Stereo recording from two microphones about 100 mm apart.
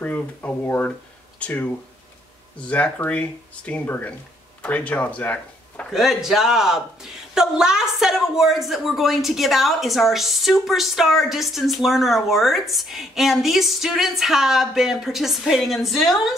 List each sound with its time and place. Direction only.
0.0 s speech: 15° left (ahead or behind)
5.9 s a man's voice: 5° right (ahead or behind)